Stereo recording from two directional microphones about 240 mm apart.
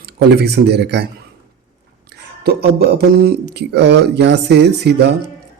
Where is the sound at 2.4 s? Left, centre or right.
Right.